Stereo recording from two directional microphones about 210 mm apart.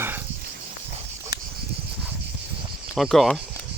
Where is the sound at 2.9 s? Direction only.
Centre (ahead or behind).